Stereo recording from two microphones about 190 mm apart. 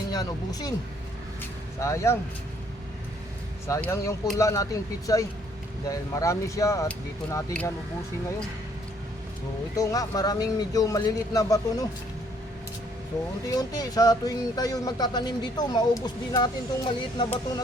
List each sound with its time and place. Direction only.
0.1 s speech: 20° left (ahead or behind)
1.8 s speech: 15° left (ahead or behind)
3.8 s speech: 15° left (ahead or behind)
9.7 s speech: 15° left (ahead or behind)
13.5 s speech: 20° left (ahead or behind)